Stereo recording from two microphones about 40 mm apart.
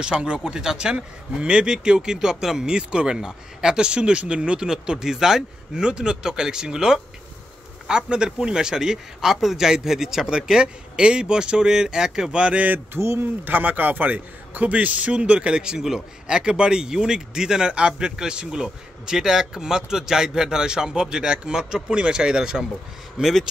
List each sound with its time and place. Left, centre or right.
0.0 s a man's voice: right
12.9 s speech: right
13.6 s a man's voice: right; by 22.7 s centre